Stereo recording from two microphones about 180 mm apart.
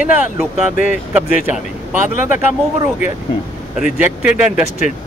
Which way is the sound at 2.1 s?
50° left (ahead or behind).